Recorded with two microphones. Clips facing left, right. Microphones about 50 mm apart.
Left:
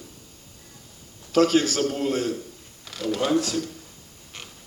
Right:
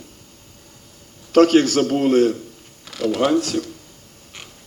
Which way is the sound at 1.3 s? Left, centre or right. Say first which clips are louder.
Right 6 dB; right.